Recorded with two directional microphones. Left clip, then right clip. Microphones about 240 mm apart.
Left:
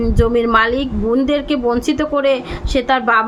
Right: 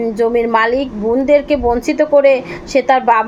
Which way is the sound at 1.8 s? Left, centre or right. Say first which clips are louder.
Right 2 dB; left.